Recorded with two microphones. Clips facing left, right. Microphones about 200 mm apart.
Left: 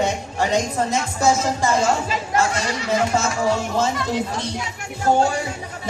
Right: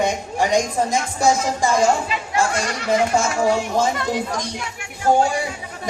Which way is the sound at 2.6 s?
55° right (ahead or behind).